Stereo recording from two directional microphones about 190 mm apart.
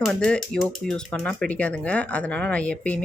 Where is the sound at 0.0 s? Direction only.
5° left (ahead or behind).